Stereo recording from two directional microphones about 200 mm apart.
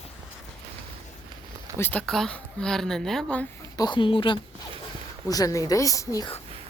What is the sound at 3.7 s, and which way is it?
Speech, 20° left (ahead or behind).